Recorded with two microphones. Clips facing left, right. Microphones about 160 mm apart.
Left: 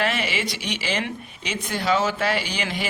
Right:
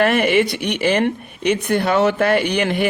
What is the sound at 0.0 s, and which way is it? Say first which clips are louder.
Speech: right 10 dB; 55° right (ahead or behind).